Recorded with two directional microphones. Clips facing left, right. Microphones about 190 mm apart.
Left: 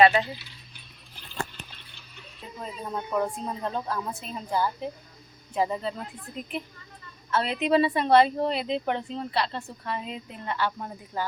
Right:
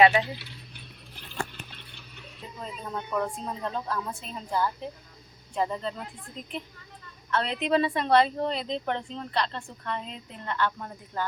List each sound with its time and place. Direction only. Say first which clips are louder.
0.0 s speech: left 1 dB; 10° right (ahead or behind)
0.3 s keys jangling: right 5 dB; 65° right (ahead or behind)
1.7 s a sound: right 2 dB; 60° right (ahead or behind)
2.6 s speech: left 2 dB; 5° left (ahead or behind)